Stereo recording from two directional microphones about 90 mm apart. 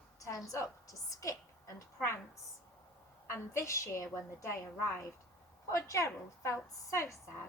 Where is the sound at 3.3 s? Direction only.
35° left (ahead or behind).